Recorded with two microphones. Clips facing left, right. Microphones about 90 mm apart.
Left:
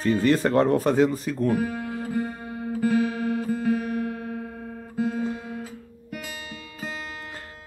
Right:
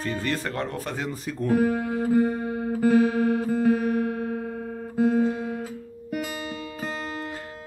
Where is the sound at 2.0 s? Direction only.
25° right (ahead or behind).